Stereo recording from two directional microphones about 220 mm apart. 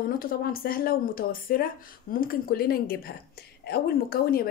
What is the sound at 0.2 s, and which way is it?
Speech, 40° left (ahead or behind).